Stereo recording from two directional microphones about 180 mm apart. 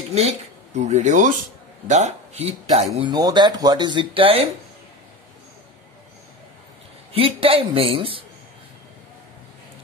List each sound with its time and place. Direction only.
0.7 s speech: 40° right (ahead or behind)
3.0 s speech: 25° right (ahead or behind)
7.1 s a woman's voice: 30° right (ahead or behind)